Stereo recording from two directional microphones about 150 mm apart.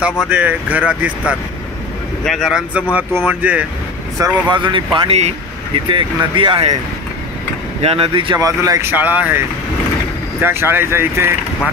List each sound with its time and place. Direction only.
0.0 s speech: 10° right (ahead or behind)
4.2 s speech: 30° right (ahead or behind)
7.8 s speech: 40° right (ahead or behind); by 8.9 s 20° right (ahead or behind)
8.9 s speech: 10° right (ahead or behind)
10.4 s speech: 15° right (ahead or behind)